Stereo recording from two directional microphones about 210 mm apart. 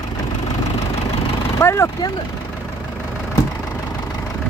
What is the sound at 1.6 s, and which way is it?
Speech, 15° left (ahead or behind).